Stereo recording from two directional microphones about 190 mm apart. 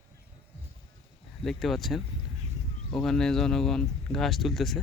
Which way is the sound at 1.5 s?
Centre (ahead or behind).